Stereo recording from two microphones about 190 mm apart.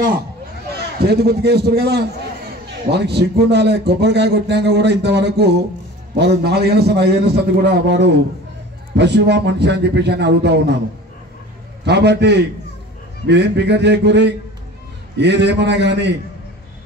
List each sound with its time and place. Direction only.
0.7 s a man's voice: 60° right (ahead or behind)
11.8 s speech: 65° right (ahead or behind)